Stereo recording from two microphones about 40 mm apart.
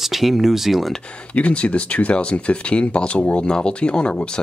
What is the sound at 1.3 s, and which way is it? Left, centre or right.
Speech, left.